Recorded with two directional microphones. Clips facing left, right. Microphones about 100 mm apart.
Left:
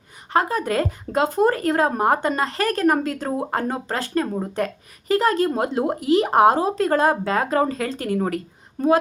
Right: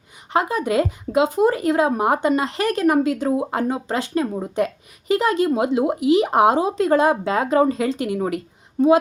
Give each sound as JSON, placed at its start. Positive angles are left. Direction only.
{"t": 0.3, "sound": "speech", "side_deg": -15}